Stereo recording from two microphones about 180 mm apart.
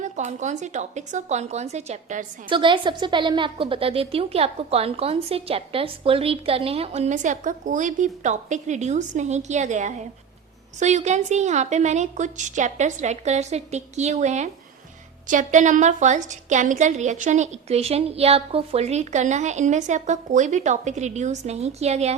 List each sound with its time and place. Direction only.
0.0 s a woman's voice: 40° right (ahead or behind)
2.5 s a woman's voice: 25° right (ahead or behind)